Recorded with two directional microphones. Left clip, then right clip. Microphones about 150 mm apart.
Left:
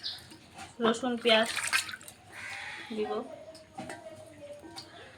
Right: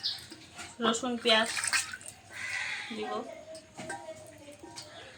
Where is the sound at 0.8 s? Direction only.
20° left (ahead or behind).